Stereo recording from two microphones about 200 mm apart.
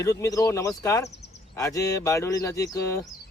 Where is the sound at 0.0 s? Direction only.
15° left (ahead or behind).